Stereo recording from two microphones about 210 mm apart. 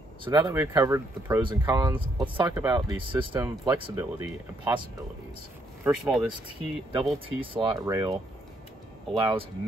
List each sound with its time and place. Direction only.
0.2 s speech: 20° right (ahead or behind)
5.9 s speech: 5° right (ahead or behind)
6.9 s speech: 25° right (ahead or behind)